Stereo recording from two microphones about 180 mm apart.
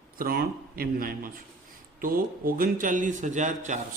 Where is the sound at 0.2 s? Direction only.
55° right (ahead or behind).